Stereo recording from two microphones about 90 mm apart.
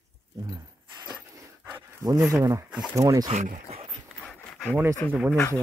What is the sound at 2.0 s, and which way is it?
Speech, 45° right (ahead or behind).